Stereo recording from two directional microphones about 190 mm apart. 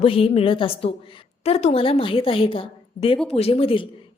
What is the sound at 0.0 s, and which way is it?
A woman's voice, 30° left (ahead or behind).